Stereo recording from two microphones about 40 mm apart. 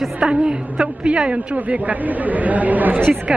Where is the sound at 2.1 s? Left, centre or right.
Right.